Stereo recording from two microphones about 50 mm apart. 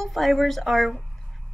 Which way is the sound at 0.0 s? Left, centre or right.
Centre.